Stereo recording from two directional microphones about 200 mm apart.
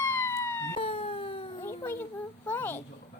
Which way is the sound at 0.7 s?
25° left (ahead or behind).